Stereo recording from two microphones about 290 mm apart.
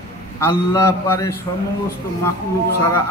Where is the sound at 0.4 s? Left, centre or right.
Centre.